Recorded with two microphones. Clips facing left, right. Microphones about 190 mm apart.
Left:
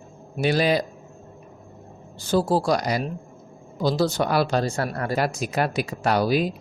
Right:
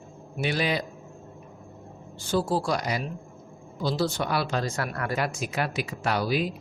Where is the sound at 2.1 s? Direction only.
40° left (ahead or behind).